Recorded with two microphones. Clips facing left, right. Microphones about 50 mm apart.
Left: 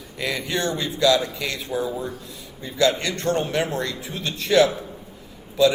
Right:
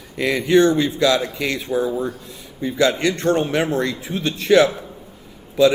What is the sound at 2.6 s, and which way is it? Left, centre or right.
Speech, right.